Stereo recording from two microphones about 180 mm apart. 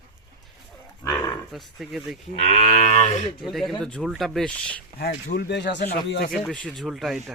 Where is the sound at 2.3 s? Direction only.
35° left (ahead or behind).